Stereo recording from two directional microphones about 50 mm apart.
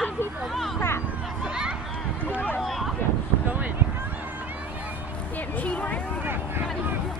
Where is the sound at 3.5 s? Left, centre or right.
Right.